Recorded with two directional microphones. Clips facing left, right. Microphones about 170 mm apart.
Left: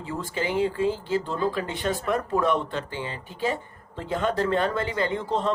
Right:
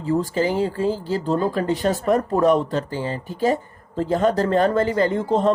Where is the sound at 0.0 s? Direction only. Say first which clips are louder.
Right 9 dB; 40° right (ahead or behind).